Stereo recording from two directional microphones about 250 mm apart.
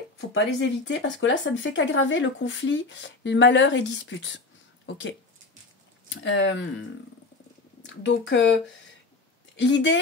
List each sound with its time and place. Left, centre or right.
0.3 s speech: left
7.8 s speech: left
9.6 s speech: left